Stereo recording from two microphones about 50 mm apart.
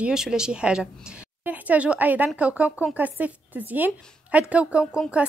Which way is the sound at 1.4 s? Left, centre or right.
Right.